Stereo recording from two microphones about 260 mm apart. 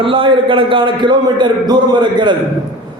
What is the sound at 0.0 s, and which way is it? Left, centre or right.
A man's voice, centre.